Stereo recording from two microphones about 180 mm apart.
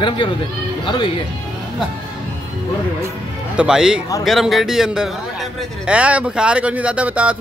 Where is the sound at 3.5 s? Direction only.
5° right (ahead or behind).